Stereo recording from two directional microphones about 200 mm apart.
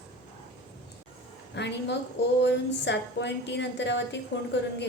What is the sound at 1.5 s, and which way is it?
A woman's voice, 60° left (ahead or behind).